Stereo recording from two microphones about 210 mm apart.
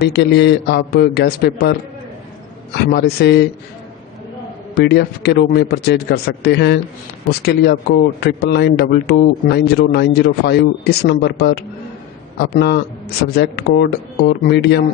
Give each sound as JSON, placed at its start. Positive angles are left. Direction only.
{"t": 0.0, "sound": "a man's voice", "side_deg": 55}
{"t": 4.7, "sound": "a man's voice", "side_deg": 50}